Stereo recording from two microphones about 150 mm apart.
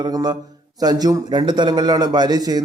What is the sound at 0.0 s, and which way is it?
A man's voice, 30° right (ahead or behind).